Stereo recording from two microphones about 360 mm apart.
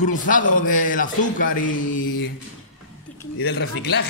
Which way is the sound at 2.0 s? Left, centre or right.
Left.